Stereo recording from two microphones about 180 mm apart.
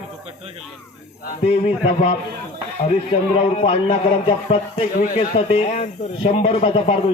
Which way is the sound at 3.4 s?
35° left (ahead or behind).